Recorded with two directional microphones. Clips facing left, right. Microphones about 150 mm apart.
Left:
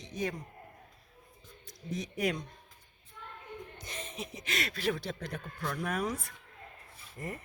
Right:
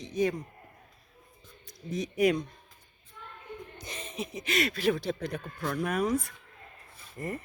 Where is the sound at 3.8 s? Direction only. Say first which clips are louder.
Right 6 dB; 20° right (ahead or behind).